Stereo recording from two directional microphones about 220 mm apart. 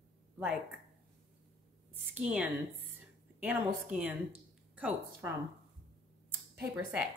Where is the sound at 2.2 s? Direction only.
5° right (ahead or behind).